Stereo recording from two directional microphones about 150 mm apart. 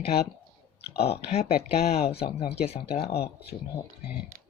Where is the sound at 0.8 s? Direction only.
90° left.